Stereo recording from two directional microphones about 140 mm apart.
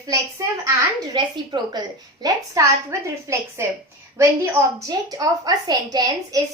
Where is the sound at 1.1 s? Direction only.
30° right (ahead or behind).